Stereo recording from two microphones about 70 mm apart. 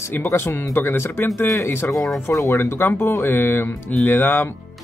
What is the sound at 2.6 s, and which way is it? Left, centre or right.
Speech, left.